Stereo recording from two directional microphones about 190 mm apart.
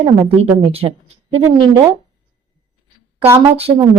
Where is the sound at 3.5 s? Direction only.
30° right (ahead or behind).